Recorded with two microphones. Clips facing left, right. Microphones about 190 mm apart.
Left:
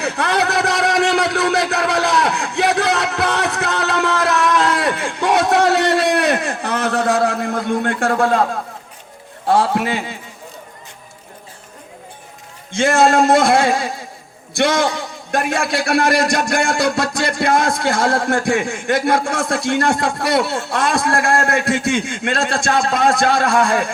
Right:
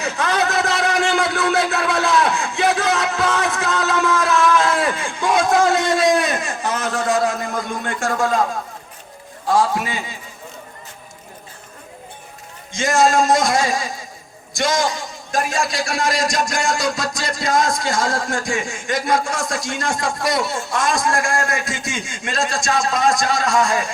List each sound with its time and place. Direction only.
0.0 s a sound: 65° left (ahead or behind)
9.5 s a man's voice: 60° left (ahead or behind)
12.7 s a man's voice: 60° left (ahead or behind)